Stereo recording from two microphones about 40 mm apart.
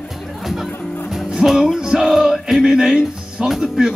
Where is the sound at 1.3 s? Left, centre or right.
Centre.